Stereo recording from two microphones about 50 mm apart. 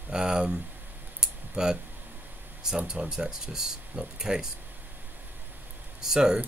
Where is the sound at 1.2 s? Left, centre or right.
Centre.